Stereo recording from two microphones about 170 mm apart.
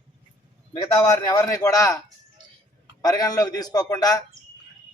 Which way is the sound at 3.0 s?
20° left (ahead or behind).